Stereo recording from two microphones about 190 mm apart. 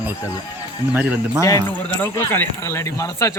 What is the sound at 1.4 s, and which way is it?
Speech, 15° left (ahead or behind).